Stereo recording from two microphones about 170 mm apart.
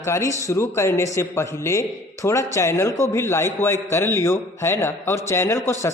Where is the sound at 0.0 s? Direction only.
15° left (ahead or behind).